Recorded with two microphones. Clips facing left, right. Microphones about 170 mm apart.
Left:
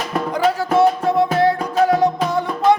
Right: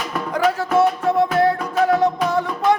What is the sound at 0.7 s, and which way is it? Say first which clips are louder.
Music: left 3 dB; 35° left (ahead or behind).